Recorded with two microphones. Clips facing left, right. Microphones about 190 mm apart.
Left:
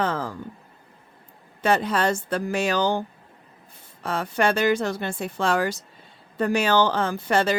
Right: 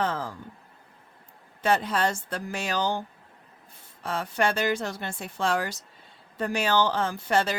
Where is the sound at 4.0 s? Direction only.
75° left (ahead or behind).